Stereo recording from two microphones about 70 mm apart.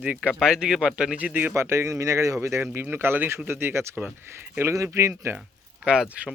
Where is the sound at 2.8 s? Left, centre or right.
Right.